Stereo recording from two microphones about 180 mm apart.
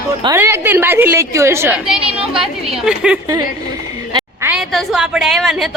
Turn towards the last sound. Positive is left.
turn(degrees=0)  # may be behind; listen again after turning